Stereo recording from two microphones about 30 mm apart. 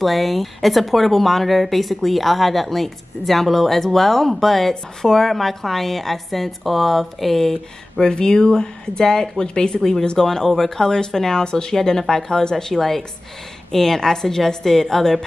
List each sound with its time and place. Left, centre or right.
0.0 s a woman's voice: centre
8.0 s speech: left
9.8 s a woman's voice: centre